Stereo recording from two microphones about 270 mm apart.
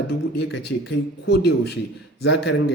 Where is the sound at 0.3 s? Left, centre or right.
Left.